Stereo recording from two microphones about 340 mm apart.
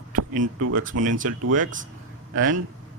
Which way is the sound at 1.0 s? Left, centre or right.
Right.